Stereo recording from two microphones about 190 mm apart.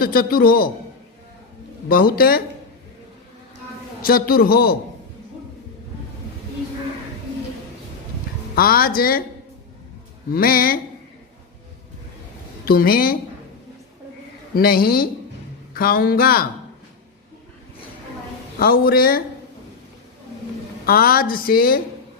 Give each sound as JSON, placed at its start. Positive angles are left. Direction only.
{"t": 0.0, "sound": "a woman's voice", "side_deg": 50}
{"t": 1.9, "sound": "a woman's voice", "side_deg": 50}
{"t": 4.0, "sound": "a woman's voice", "side_deg": 50}
{"t": 8.5, "sound": "a woman's voice", "side_deg": 50}
{"t": 10.3, "sound": "a woman's voice", "side_deg": 50}
{"t": 12.6, "sound": "a woman's voice", "side_deg": 50}
{"t": 14.5, "sound": "a woman's voice", "side_deg": 50}
{"t": 18.6, "sound": "a woman's voice", "side_deg": 50}
{"t": 20.8, "sound": "a woman's voice", "side_deg": 50}